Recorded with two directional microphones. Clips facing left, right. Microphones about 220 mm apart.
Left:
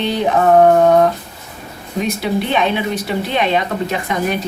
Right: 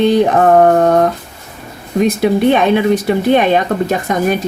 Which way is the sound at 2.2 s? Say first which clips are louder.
Right 6 dB; 50° right (ahead or behind).